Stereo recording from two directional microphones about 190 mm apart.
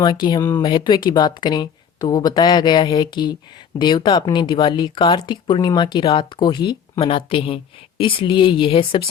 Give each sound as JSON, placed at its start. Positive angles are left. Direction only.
{"t": 0.0, "sound": "speech", "side_deg": 20}